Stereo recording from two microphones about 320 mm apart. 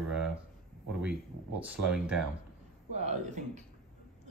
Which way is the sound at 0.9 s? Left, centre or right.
Centre.